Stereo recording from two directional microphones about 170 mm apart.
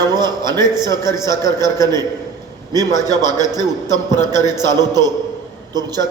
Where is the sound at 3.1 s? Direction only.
20° right (ahead or behind).